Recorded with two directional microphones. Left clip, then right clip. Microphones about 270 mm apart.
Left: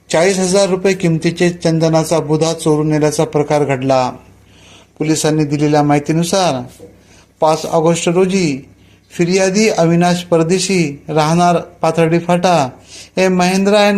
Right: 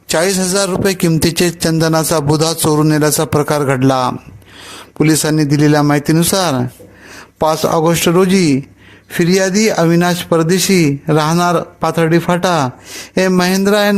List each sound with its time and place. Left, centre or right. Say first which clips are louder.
0.1 s a man's voice: left 2 dB; right